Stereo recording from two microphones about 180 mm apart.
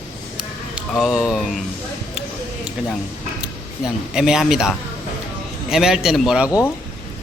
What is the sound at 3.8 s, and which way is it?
Speech, 5° right (ahead or behind).